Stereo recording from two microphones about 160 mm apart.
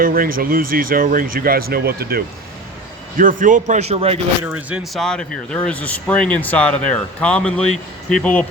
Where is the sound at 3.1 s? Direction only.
55° right (ahead or behind); by 4.1 s 40° right (ahead or behind).